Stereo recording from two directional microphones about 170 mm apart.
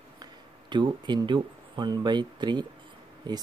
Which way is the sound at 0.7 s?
25° right (ahead or behind).